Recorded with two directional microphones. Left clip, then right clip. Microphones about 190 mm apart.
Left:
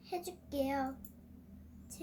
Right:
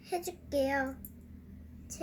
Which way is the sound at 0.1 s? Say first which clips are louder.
Right 5 dB; 40° left (ahead or behind).